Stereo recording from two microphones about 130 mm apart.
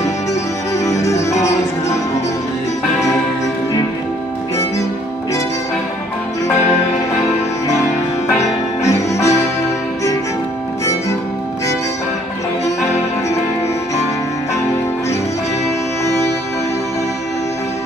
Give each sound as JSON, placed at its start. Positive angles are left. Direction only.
{"t": 0.3, "sound": "music", "side_deg": 25}
{"t": 8.4, "sound": "music", "side_deg": 25}